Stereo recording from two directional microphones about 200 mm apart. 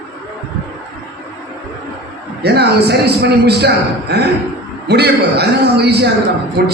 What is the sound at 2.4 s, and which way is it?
A man's voice, 55° right (ahead or behind).